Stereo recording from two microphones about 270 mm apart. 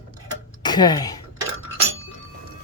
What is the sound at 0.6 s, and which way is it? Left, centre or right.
Speech, centre.